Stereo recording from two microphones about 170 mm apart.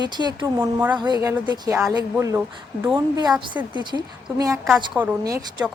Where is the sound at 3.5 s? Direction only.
15° right (ahead or behind).